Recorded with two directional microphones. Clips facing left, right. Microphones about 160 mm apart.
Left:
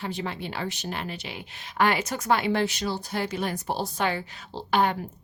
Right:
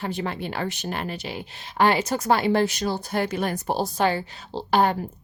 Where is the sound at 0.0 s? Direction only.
50° right (ahead or behind).